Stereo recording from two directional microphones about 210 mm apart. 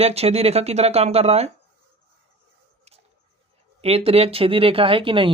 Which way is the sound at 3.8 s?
30° right (ahead or behind).